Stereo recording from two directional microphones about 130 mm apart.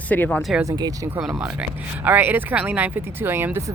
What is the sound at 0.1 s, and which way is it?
Speech, 10° left (ahead or behind).